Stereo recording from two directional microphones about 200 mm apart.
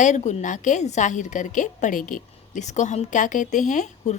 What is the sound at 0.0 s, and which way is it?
A woman's voice, 35° left (ahead or behind).